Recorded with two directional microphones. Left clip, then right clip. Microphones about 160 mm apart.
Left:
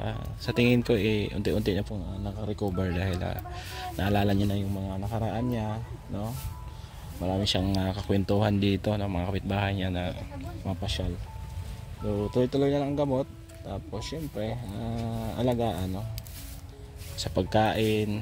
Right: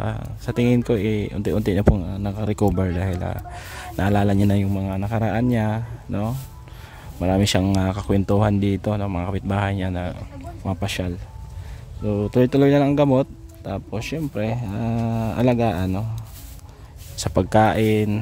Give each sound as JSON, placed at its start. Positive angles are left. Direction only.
{"t": 0.0, "sound": "speech", "side_deg": -20}
{"t": 1.9, "sound": "speech", "side_deg": -55}
{"t": 2.7, "sound": "speech", "side_deg": -25}
{"t": 4.5, "sound": "speech", "side_deg": -50}
{"t": 7.5, "sound": "speech", "side_deg": -35}
{"t": 10.8, "sound": "speech", "side_deg": -50}
{"t": 12.1, "sound": "speech", "side_deg": -50}
{"t": 17.2, "sound": "speech", "side_deg": -35}